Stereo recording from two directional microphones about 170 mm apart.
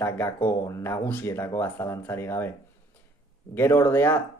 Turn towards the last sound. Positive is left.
turn(degrees=15)  # may be behind; listen again after turning